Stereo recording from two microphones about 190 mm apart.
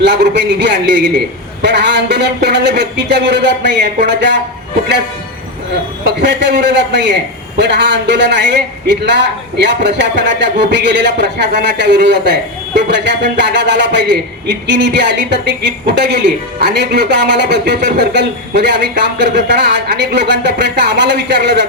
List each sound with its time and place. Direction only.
0.0 s a man's voice: 65° right (ahead or behind)
6.1 s a man's voice: 65° right (ahead or behind)